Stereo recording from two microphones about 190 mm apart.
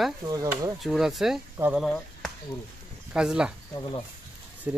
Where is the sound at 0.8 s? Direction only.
Centre (ahead or behind).